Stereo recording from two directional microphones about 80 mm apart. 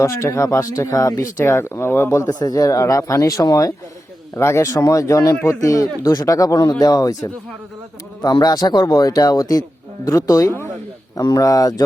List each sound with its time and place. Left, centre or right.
0.0 s speech: left
2.4 s speech: left
4.4 s speech: left